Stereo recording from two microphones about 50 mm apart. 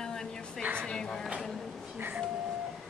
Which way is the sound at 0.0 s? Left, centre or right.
Centre.